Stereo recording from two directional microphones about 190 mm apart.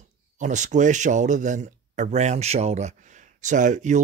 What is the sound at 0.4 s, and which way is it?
Speech, 40° right (ahead or behind).